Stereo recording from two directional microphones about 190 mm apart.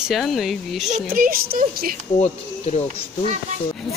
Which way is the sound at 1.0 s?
50° right (ahead or behind).